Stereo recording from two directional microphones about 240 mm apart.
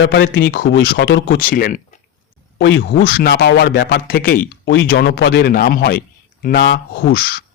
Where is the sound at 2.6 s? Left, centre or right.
Left.